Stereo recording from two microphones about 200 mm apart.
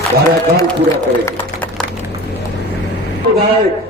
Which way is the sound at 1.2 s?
5° left (ahead or behind).